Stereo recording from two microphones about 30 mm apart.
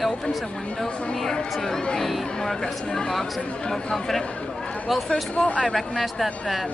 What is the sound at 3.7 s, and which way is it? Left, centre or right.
Speech, centre.